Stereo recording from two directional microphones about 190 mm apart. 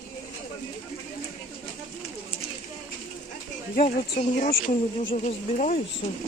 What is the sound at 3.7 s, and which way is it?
Speech, 40° left (ahead or behind).